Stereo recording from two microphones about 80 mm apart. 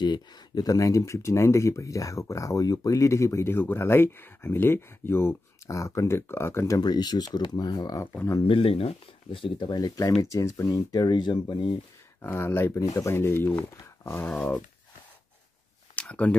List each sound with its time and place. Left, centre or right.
0.0 s speech: left
0.7 s speech: left
6.8 s speech: left
9.4 s speech: left
9.8 s speech: left
10.3 s speech: left
12.2 s speech: left
12.7 s speech: left
14.2 s speech: centre
16.0 s speech: centre